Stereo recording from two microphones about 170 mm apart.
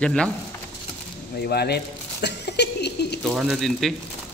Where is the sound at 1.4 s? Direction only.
70° left (ahead or behind).